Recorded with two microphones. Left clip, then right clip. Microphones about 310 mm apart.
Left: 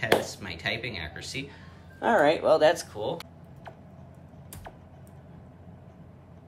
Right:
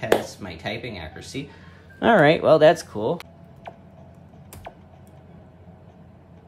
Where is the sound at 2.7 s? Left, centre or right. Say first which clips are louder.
Right 6 dB; centre.